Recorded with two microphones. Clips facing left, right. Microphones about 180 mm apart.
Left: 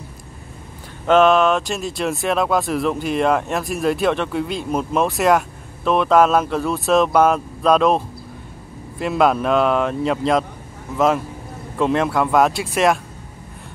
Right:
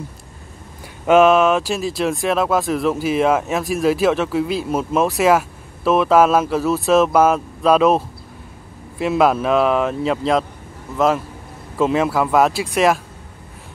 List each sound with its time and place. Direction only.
1.0 s speech: 5° right (ahead or behind)